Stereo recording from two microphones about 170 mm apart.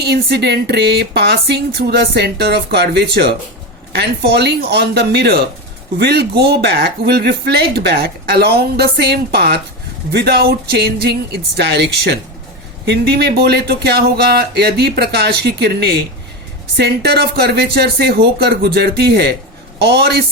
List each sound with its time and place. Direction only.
0.0 s speech: 75° right (ahead or behind)